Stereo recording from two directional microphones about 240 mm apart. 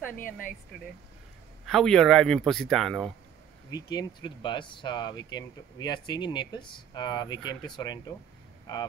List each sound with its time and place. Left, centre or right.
0.1 s speech: left
1.7 s speech: centre
3.7 s speech: centre